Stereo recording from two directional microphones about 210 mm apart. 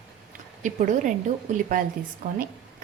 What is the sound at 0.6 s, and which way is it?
A woman's voice, 35° right (ahead or behind).